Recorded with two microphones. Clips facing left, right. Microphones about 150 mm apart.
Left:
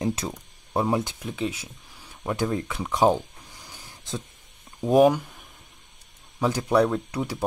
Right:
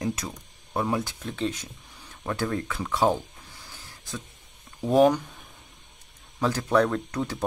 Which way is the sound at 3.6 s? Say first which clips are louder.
Left 1 dB; 15° left (ahead or behind).